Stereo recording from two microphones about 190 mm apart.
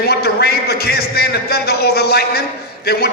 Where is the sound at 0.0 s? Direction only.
60° left (ahead or behind).